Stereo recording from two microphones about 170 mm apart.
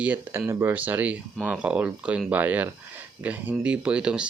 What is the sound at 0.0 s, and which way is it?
Speech, 10° right (ahead or behind).